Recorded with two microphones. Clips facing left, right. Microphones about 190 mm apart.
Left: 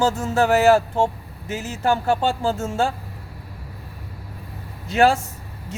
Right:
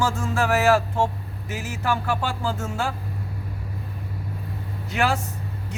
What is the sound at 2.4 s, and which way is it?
Speech, 25° left (ahead or behind).